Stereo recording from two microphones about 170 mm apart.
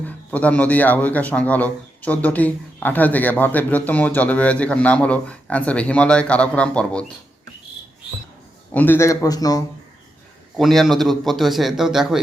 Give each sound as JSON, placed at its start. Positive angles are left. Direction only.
{"t": 0.0, "sound": "a man's voice", "side_deg": 10}
{"t": 8.7, "sound": "a man's voice", "side_deg": 10}
{"t": 10.6, "sound": "a man's voice", "side_deg": 0}